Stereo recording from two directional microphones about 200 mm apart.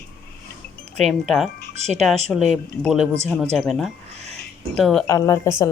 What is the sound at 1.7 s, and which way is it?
Speech, 35° right (ahead or behind).